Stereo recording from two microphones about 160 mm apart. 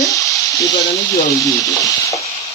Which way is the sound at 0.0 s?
20° left (ahead or behind).